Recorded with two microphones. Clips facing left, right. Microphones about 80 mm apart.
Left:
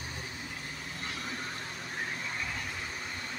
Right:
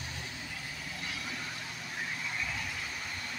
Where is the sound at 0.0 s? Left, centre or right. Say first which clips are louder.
Left 1 dB; left.